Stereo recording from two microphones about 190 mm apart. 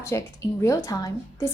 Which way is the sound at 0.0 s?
15° left (ahead or behind).